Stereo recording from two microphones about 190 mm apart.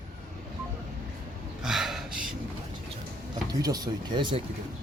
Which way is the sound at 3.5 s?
20° right (ahead or behind).